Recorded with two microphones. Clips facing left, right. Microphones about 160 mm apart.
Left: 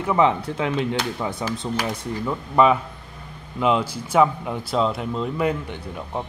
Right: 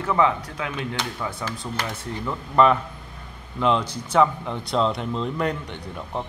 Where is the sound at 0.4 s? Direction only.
30° left (ahead or behind).